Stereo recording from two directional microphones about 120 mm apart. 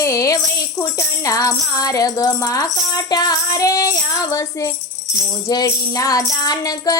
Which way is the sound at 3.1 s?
35° left (ahead or behind).